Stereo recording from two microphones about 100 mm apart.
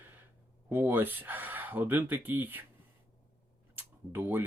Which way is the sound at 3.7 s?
20° right (ahead or behind).